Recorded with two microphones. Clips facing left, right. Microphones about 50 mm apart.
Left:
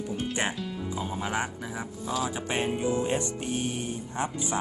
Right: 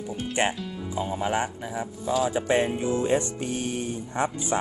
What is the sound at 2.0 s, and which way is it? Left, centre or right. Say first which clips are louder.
Speech: right 6 dB; right.